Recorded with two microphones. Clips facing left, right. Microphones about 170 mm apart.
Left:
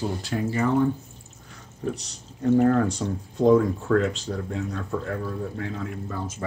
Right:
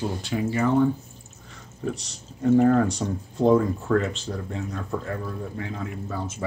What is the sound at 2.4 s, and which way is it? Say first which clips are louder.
Speech: right 1 dB; centre (ahead or behind).